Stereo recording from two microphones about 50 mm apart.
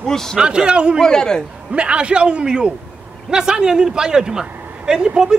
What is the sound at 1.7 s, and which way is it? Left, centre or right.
A man's voice, right.